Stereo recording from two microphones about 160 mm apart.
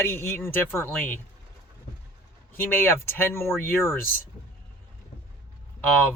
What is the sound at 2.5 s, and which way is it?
Speech, 15° left (ahead or behind).